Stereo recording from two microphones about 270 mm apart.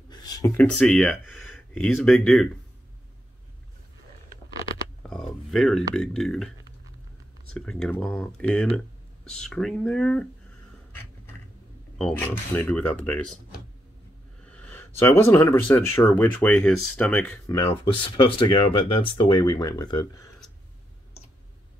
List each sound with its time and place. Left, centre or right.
0.1 s a sound: centre
0.7 s speech: centre
5.1 s speech: centre
7.5 s speech: centre
12.0 s speech: centre
14.5 s speech: centre
17.6 s speech: centre